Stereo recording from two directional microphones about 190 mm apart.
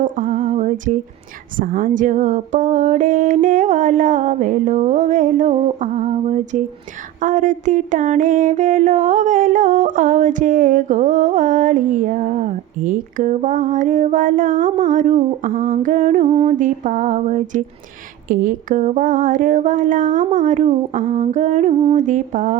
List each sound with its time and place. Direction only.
0.0 s a sound: 45° right (ahead or behind)
7.2 s mantra: 45° right (ahead or behind)
16.3 s music: 30° right (ahead or behind)
16.6 s mantra: 40° right (ahead or behind)